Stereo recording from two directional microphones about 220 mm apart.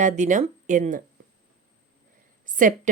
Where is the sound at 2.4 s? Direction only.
35° right (ahead or behind).